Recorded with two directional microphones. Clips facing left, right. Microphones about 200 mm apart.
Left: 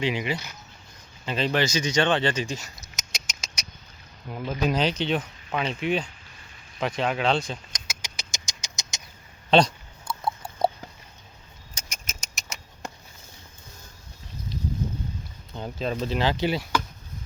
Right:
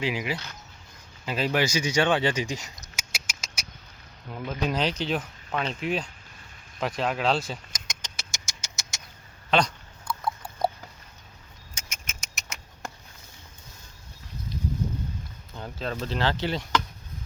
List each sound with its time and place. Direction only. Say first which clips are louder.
0.0 s speech: left 2 dB; 5° right (ahead or behind)
4.3 s speech: left 3 dB; 10° left (ahead or behind)
8.0 s a sound: left 2 dB; 15° left (ahead or behind)
9.5 s a sound: left 5 dB; 30° left (ahead or behind)
11.7 s rodents: left 2 dB; 35° left (ahead or behind)
15.5 s speech: left 4 dB; 20° left (ahead or behind)